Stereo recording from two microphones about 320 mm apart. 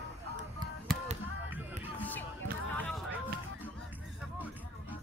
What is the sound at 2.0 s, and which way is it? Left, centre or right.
Music, centre.